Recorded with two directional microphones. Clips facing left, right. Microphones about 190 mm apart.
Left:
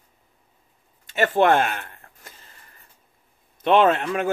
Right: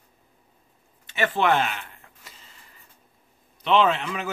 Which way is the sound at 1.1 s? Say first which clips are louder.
Left 4 dB; 45° left (ahead or behind).